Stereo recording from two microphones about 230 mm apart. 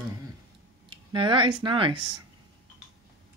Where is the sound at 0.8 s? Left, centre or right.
Right.